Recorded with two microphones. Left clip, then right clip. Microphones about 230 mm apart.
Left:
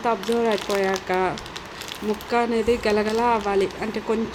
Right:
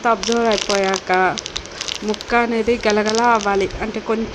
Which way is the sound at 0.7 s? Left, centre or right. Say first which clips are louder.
Right 5 dB; right.